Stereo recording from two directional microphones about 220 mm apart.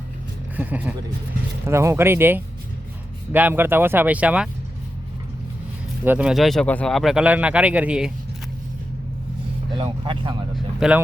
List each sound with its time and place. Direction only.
0.5 s speech: 5° right (ahead or behind)
6.1 s speech: 5° right (ahead or behind)
9.7 s speech: 20° right (ahead or behind)
10.8 s speech: 5° right (ahead or behind)